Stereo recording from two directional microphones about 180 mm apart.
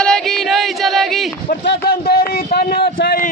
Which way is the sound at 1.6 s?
60° left (ahead or behind).